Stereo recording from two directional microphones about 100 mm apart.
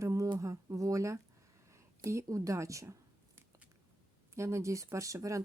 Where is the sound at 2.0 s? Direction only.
30° right (ahead or behind).